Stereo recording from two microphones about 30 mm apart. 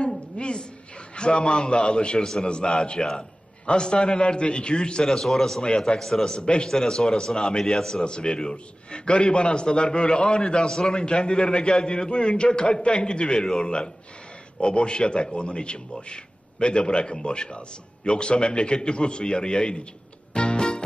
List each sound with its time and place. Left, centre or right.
0.4 s a sound: left
1.1 s a man's voice: left
2.1 s a man's voice: centre
2.4 s a man's voice: left
5.0 s a man's voice: centre
5.7 s a man's voice: left
5.9 s a man's voice: centre
6.3 s a man's voice: left
6.7 s a man's voice: centre
8.0 s a man's voice: left
11.1 s a man's voice: left
14.6 s a man's voice: left
20.3 s music: left